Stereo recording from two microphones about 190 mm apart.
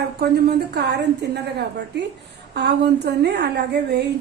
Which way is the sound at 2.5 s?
60° right (ahead or behind).